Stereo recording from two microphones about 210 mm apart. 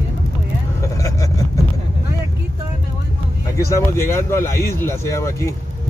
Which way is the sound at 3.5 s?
10° left (ahead or behind).